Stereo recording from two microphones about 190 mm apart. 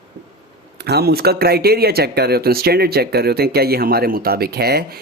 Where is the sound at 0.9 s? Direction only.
55° right (ahead or behind).